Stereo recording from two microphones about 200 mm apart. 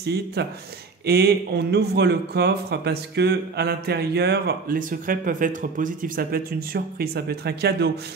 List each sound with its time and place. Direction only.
0.0 s speech: 55° right (ahead or behind)